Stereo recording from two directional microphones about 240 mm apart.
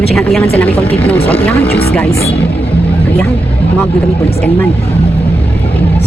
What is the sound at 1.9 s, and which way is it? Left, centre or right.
Speech, centre.